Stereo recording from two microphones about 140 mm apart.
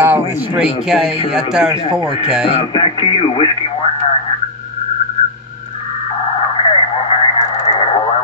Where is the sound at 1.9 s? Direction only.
35° right (ahead or behind).